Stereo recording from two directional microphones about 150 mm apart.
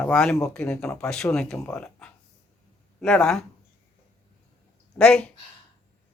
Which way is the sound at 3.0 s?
5° left (ahead or behind).